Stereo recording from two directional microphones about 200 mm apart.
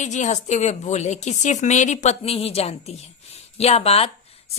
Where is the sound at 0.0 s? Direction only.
35° left (ahead or behind).